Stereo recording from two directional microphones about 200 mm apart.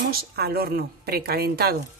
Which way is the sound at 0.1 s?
50° right (ahead or behind).